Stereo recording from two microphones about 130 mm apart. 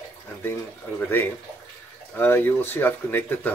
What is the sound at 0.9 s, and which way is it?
Speech, 15° left (ahead or behind).